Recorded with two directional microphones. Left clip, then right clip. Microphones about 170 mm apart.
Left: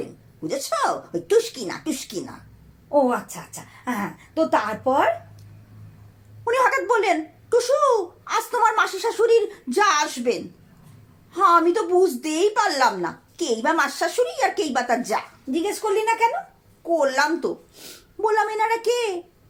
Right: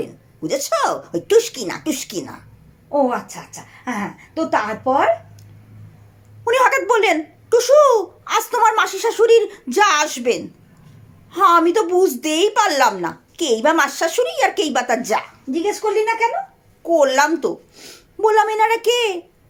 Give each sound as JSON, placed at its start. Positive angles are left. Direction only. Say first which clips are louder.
{"t": 0.0, "sound": "speech", "louder": "right 5 dB", "side_deg": -45}
{"t": 2.9, "sound": "a woman's voice", "louder": "right 2 dB", "side_deg": 10}
{"t": 6.4, "sound": "speech", "louder": "right 5 dB", "side_deg": -45}
{"t": 15.5, "sound": "a woman's voice", "louder": "right 4 dB", "side_deg": 10}
{"t": 16.8, "sound": "speech", "louder": "right 6 dB", "side_deg": -45}